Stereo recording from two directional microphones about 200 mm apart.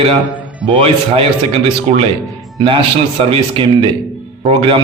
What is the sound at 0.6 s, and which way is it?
A man's voice, 30° right (ahead or behind).